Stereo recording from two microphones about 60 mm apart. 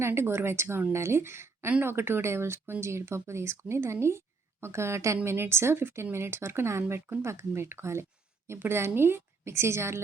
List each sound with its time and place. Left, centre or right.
0.0 s a woman's voice: right